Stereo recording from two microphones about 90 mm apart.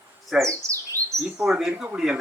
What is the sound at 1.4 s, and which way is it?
Speech, 5° right (ahead or behind).